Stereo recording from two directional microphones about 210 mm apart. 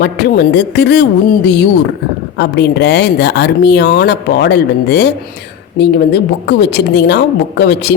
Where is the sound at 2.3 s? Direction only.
55° left (ahead or behind).